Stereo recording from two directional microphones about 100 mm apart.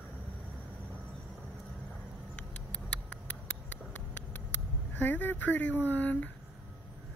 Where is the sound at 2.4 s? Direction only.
15° left (ahead or behind).